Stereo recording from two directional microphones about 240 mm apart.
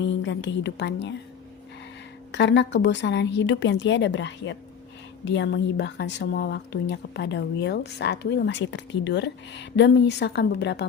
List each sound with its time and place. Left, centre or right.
0.0 s a woman's voice: left
2.3 s a woman's voice: left